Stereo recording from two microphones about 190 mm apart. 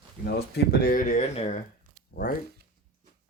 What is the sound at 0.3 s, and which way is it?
Speech, 55° left (ahead or behind).